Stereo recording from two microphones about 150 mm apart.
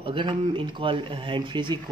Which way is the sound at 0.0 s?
35° right (ahead or behind).